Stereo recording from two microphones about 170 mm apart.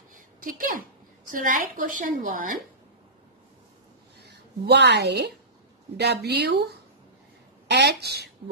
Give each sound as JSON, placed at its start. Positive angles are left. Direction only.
{"t": 0.1, "sound": "a sound", "side_deg": -55}
{"t": 1.3, "sound": "a woman's voice", "side_deg": -55}
{"t": 4.2, "sound": "a woman's voice", "side_deg": -80}
{"t": 7.7, "sound": "speech", "side_deg": -75}